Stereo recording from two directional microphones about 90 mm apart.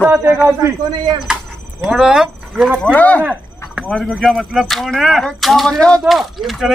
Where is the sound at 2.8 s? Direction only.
15° left (ahead or behind).